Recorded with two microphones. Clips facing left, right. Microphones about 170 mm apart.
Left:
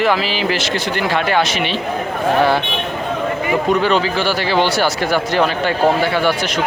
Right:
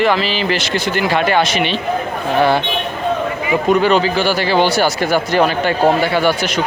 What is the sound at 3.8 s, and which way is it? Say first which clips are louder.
Speech: right 2 dB; 5° right (ahead or behind).